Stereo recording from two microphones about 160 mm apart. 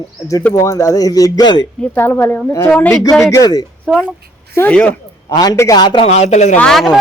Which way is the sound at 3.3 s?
25° left (ahead or behind).